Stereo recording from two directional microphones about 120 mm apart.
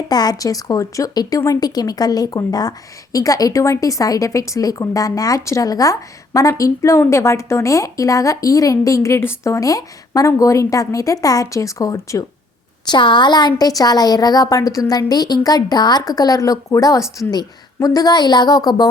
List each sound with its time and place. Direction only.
0.1 s a woman's voice: 35° left (ahead or behind)
12.9 s a woman's voice: 40° left (ahead or behind); by 17.8 s 25° left (ahead or behind)
17.8 s a woman's voice: 35° left (ahead or behind)